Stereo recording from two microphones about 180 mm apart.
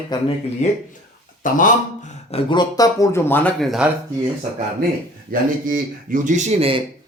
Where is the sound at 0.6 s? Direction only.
40° left (ahead or behind).